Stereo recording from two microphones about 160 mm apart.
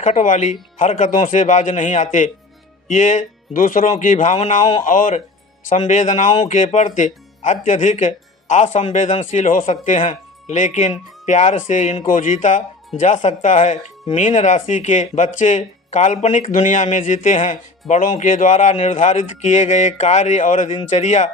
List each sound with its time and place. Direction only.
0.0 s speech: 50° left (ahead or behind)